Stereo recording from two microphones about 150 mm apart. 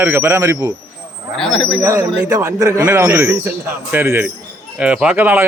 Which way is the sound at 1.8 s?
20° right (ahead or behind).